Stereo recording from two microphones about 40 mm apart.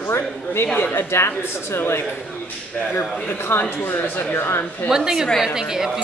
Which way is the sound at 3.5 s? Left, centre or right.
Left.